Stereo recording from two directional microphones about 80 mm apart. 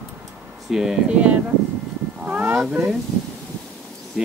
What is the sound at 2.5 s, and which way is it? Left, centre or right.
Speech, centre.